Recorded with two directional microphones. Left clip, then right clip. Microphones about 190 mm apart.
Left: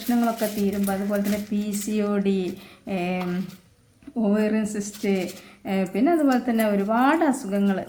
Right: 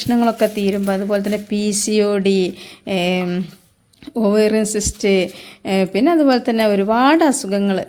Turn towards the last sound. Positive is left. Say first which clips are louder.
# right 6 dB
turn(degrees=-35)  # may be behind; listen again after turning